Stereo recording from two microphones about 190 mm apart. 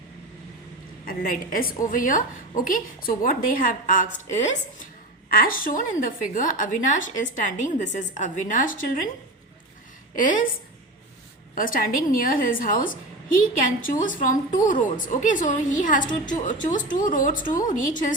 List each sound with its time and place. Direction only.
1.0 s a woman's voice: 45° left (ahead or behind)
5.3 s a woman's voice: 50° left (ahead or behind)
10.2 s a woman's voice: 45° left (ahead or behind)
11.5 s a woman's voice: 45° left (ahead or behind)